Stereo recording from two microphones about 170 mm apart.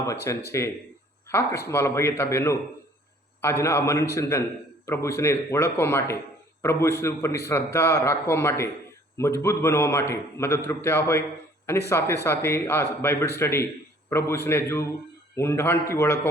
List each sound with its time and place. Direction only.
0.3 s a man's voice: 15° left (ahead or behind)